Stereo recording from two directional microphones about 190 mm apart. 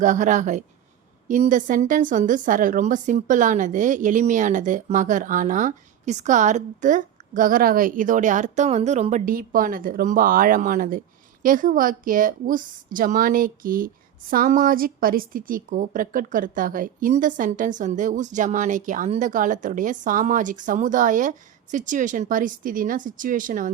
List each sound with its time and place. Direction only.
0.0 s a woman's voice: 40° right (ahead or behind)